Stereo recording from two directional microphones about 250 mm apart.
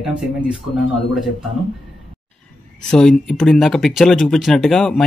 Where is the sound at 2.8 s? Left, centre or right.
Centre.